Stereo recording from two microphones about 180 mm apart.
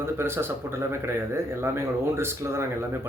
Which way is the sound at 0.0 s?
15° right (ahead or behind).